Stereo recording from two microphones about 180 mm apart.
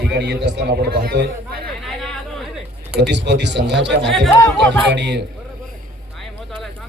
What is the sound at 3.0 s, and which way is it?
Speech, 75° right (ahead or behind).